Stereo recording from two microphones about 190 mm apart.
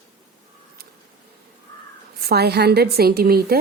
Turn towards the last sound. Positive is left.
turn(degrees=-55)  # may be behind; listen again after turning